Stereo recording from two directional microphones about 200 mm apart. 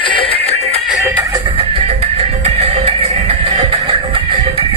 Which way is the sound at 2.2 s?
30° right (ahead or behind).